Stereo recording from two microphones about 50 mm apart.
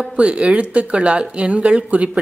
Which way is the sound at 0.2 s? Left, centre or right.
Right.